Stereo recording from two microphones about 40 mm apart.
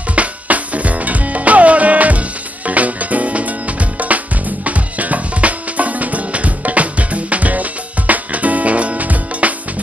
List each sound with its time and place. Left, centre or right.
0.1 s music: right